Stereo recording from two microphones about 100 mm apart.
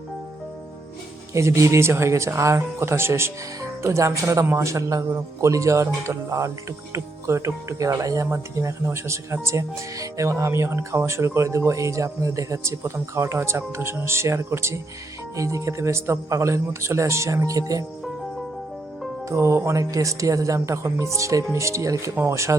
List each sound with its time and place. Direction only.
1.3 s speech: 30° right (ahead or behind)
19.3 s speech: 30° right (ahead or behind)